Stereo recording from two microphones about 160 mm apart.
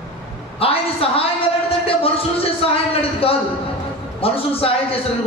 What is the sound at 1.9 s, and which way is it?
Speech, 35° left (ahead or behind).